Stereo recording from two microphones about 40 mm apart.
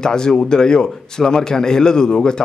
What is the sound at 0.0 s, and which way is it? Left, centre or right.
A man's voice, centre.